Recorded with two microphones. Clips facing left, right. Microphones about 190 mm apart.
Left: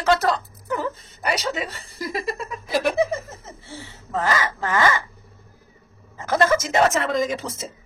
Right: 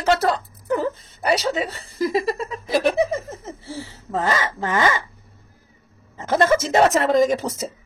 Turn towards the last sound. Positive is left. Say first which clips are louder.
# right 6 dB
turn(degrees=-40)  # may be behind; listen again after turning